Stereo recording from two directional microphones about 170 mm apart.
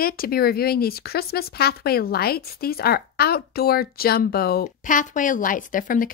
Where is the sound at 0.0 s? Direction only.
60° left (ahead or behind).